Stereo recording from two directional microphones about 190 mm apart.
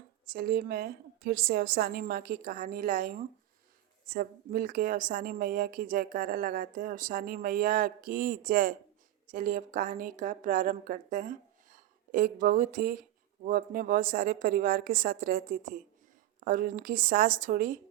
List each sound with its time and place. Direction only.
0.3 s a woman's voice: 50° right (ahead or behind)